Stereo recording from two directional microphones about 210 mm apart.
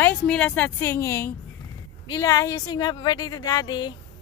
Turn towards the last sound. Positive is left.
turn(degrees=20)  # may be behind; listen again after turning